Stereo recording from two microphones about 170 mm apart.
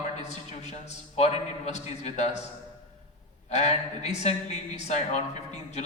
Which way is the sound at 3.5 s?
40° left (ahead or behind).